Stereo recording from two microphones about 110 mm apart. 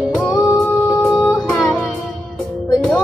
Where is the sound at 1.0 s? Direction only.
Centre (ahead or behind).